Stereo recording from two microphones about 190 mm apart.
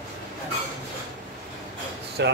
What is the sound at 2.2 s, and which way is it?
Speech, 65° right (ahead or behind).